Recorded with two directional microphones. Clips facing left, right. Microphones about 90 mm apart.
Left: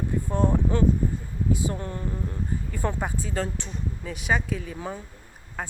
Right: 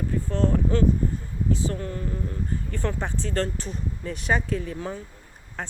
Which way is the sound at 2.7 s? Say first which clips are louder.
Left 1 dB; 10° left (ahead or behind).